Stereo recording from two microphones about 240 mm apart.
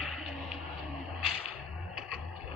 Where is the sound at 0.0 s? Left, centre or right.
Centre.